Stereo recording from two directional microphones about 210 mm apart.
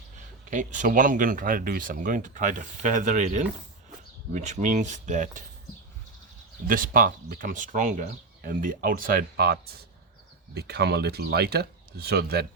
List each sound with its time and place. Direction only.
0.5 s speech: 35° right (ahead or behind)
6.7 s speech: 40° right (ahead or behind)